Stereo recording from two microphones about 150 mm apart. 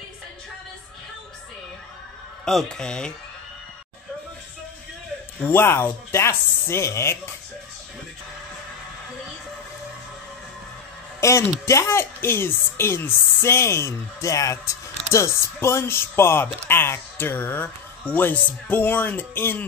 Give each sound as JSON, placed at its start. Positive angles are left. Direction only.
{"t": 2.4, "sound": "speech", "side_deg": 5}
{"t": 5.4, "sound": "speech", "side_deg": 15}
{"t": 11.1, "sound": "speech", "side_deg": 20}